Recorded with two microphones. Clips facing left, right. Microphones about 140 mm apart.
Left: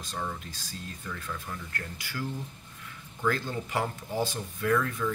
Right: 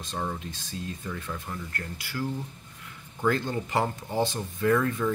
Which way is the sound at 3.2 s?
30° right (ahead or behind).